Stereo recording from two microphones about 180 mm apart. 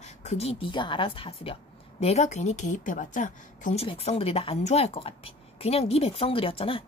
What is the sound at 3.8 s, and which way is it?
A woman's voice, 30° left (ahead or behind).